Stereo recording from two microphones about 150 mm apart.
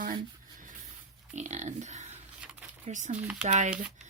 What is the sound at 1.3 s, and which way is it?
Speech, 50° right (ahead or behind).